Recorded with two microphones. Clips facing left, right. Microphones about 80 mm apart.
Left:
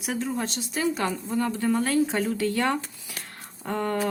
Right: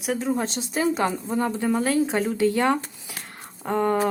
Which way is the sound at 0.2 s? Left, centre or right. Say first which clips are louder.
Right 4 dB; right.